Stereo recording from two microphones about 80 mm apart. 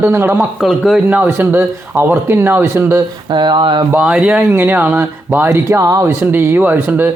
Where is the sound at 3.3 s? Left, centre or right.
Right.